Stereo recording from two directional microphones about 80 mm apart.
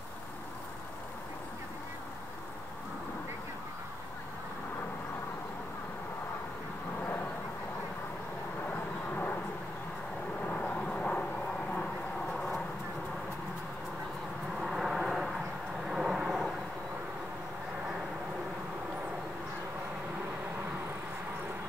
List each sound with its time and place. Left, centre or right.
9.1 s vehicle: left
10.4 s vehicle: centre
14.6 s vehicle: centre